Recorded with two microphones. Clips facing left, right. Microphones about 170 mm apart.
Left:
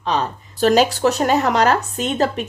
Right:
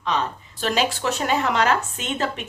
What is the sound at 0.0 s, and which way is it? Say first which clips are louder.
Speech: left 3 dB; 35° left (ahead or behind).